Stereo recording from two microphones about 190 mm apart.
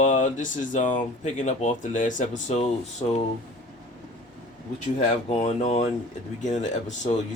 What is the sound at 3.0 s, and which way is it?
Speech, 25° left (ahead or behind).